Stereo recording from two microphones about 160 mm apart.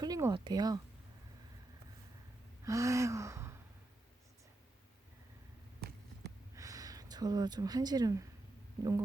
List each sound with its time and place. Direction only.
0.0 s speech: 25° right (ahead or behind)
2.6 s gasp: 20° right (ahead or behind)
6.6 s speech: 20° right (ahead or behind)